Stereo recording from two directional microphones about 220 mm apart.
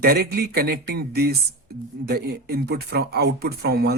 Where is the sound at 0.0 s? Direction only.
45° right (ahead or behind).